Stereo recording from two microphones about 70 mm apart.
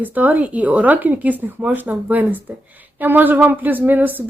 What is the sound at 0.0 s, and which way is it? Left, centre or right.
A woman's voice, right.